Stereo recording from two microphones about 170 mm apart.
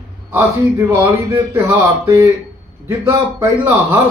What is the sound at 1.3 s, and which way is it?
Speech, 15° right (ahead or behind).